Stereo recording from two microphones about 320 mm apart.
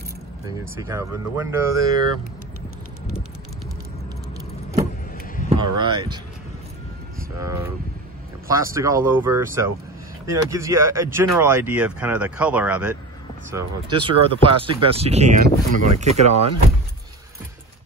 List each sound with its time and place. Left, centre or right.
0.7 s speech: centre
5.1 s a sound: left
5.5 s speech: centre
7.4 s speech: centre